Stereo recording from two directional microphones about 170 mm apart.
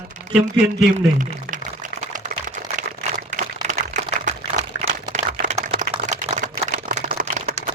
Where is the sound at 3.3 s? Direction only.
45° right (ahead or behind).